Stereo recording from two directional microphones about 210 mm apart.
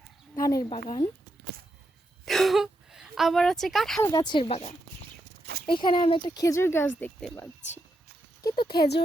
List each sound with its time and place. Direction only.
0.3 s speech: 15° left (ahead or behind)
2.2 s a sound: centre (ahead or behind)
4.0 s speech: 20° left (ahead or behind)
8.4 s speech: 20° left (ahead or behind)
8.7 s speech: 50° left (ahead or behind)